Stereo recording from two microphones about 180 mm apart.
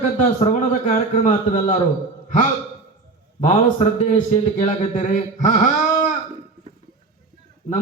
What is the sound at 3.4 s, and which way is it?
A man's voice, 40° left (ahead or behind).